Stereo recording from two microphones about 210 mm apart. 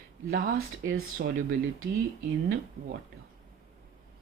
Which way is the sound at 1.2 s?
50° right (ahead or behind).